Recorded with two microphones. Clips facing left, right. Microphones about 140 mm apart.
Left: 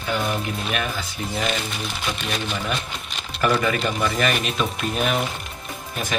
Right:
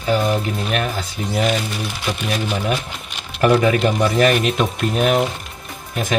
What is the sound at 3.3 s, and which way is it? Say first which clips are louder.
A man's voice: right 6 dB; 50° right (ahead or behind).